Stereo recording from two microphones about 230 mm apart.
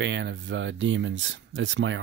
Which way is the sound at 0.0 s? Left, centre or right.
Right.